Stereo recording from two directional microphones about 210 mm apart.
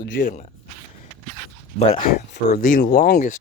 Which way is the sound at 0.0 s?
50° left (ahead or behind).